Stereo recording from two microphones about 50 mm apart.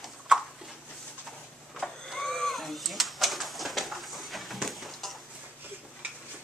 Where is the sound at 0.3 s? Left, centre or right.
Centre.